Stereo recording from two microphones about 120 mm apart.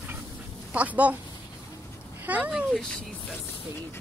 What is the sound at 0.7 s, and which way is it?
Speech, 10° right (ahead or behind).